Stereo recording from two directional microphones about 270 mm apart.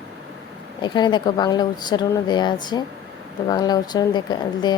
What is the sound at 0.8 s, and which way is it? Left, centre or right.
Speech, centre.